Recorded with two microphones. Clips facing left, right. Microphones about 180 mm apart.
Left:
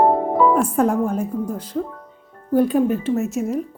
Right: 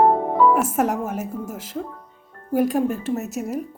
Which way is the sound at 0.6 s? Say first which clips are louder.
Left 4 dB; 85° right.